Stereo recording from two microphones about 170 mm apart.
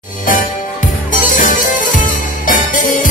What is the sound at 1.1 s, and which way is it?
Music, 50° left (ahead or behind).